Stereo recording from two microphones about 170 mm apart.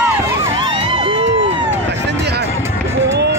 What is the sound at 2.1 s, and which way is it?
Run, 80° right.